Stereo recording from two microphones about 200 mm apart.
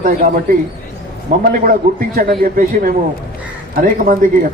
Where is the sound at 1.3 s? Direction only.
45° right (ahead or behind).